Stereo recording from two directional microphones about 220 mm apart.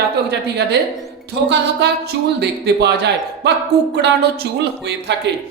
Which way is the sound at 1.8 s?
50° right (ahead or behind).